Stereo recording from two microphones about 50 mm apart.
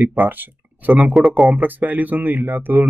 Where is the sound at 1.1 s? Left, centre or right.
Centre.